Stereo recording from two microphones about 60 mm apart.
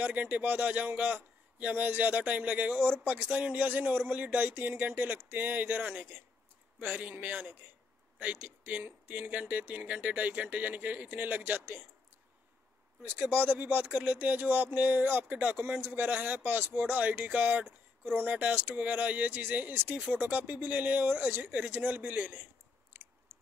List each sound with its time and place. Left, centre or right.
0.0 s a man's voice: right
13.3 s a man's voice: right
22.9 s chewing: right
23.3 s tick-tock: right